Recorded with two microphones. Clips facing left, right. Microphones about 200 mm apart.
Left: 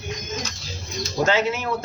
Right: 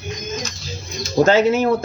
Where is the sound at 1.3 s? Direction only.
40° right (ahead or behind).